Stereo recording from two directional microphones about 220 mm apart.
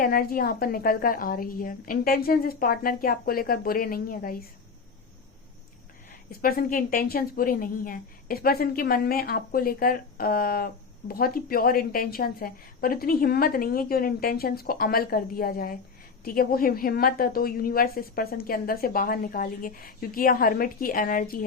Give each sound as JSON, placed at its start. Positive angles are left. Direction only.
{"t": 0.0, "sound": "a woman's voice", "side_deg": 40}
{"t": 6.4, "sound": "a woman's voice", "side_deg": 40}